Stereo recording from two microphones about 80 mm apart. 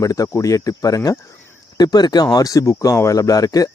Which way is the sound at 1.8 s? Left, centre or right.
Left.